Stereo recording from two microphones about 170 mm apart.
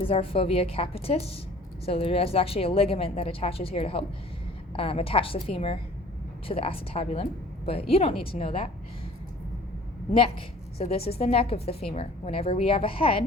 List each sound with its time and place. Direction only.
0.1 s a woman's voice: 35° left (ahead or behind)
10.1 s a woman's voice: 35° left (ahead or behind)